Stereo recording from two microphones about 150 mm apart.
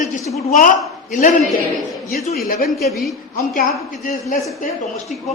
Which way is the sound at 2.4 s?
70° left (ahead or behind).